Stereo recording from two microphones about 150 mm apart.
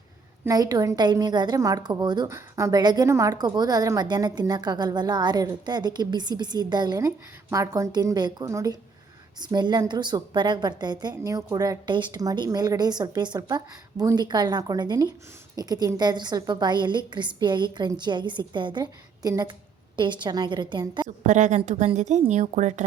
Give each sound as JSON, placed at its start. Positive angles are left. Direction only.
{"t": 0.4, "sound": "a woman's voice", "side_deg": -25}
{"t": 21.2, "sound": "a woman's voice", "side_deg": -55}